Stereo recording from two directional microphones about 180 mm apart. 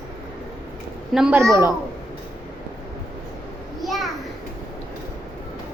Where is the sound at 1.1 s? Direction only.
5° right (ahead or behind).